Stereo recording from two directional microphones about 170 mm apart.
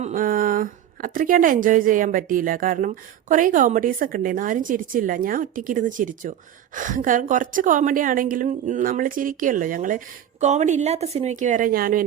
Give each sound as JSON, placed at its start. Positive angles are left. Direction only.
{"t": 0.0, "sound": "a woman's voice", "side_deg": -50}